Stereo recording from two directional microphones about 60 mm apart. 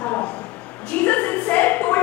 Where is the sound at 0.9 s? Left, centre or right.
Left.